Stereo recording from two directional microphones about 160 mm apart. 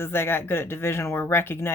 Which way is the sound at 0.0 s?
15° left (ahead or behind).